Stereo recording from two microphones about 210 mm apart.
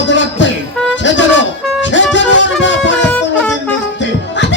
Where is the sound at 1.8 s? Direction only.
60° left (ahead or behind).